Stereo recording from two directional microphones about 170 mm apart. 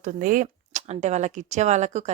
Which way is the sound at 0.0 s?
50° right (ahead or behind).